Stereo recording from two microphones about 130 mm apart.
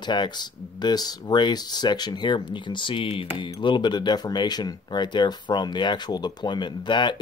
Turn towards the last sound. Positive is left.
turn(degrees=35)  # may be behind; listen again after turning